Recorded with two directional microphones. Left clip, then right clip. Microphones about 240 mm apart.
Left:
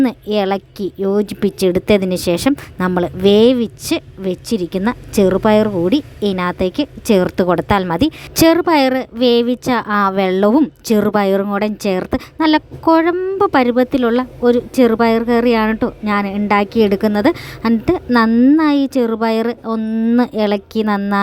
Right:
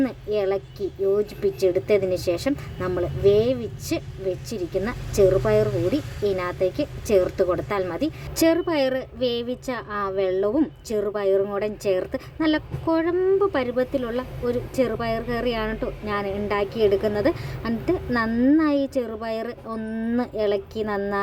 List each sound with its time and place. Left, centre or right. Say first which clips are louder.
0.0 s speech: left 7 dB; left
18.3 s speech: left 6 dB; left
18.5 s speech: left 7 dB; left
19.8 s speech: left 10 dB; left
20.1 s speech: left 6 dB; left